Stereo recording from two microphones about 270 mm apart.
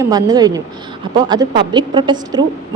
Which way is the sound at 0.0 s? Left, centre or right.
Centre.